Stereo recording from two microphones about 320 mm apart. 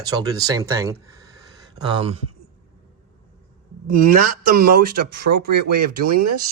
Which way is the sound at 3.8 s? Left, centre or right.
Right.